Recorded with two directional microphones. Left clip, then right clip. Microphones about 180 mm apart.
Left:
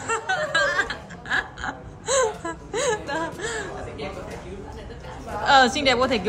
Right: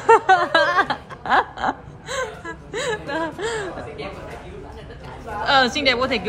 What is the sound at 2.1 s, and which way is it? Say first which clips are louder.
Speech: left 5 dB; 10° left (ahead or behind).